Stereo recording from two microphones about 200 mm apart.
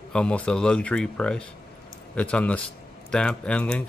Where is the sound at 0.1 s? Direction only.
5° left (ahead or behind).